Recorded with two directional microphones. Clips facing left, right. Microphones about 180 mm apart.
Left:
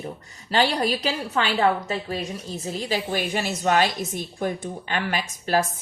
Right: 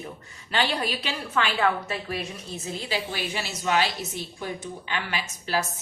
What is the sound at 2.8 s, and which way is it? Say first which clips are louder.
A woman's voice: left 5 dB; 45° left (ahead or behind).